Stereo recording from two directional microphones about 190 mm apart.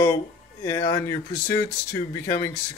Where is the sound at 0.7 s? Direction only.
20° left (ahead or behind).